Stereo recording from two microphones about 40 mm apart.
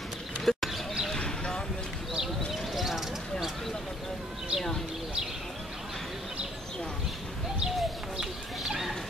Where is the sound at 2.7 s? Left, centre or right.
Centre.